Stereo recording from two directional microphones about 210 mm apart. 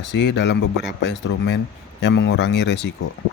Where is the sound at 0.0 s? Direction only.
55° left (ahead or behind).